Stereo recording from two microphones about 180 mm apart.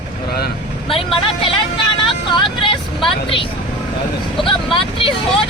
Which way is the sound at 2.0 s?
30° left (ahead or behind).